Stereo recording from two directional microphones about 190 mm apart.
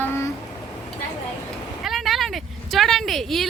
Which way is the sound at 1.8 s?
Centre (ahead or behind).